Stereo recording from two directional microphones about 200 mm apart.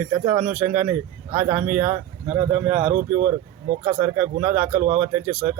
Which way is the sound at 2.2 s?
30° right (ahead or behind).